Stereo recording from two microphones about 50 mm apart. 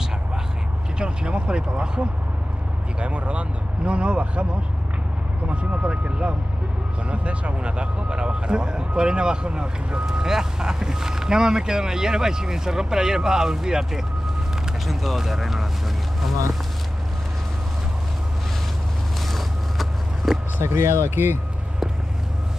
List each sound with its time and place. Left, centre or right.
0.9 s speech: centre
5.5 s speech: right; by 15.6 s centre
19.3 s vehicle: centre
20.6 s speech: right